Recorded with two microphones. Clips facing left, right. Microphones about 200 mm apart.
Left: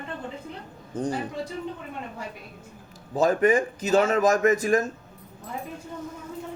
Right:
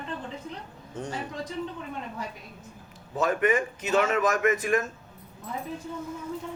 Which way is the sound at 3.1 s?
35° left (ahead or behind).